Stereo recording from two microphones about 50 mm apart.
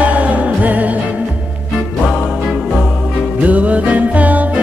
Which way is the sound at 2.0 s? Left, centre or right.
Centre.